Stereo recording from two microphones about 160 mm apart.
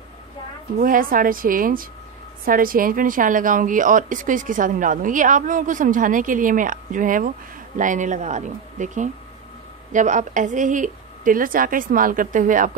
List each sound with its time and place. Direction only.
0.7 s a woman's voice: 60° right (ahead or behind)